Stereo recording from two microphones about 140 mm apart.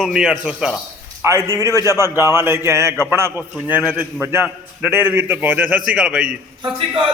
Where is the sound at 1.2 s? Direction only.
20° right (ahead or behind).